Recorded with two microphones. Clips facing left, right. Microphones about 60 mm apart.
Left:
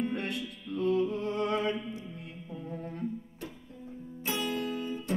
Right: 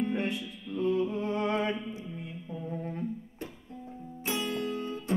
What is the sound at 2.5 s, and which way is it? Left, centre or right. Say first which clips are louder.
Music: right 3 dB; centre.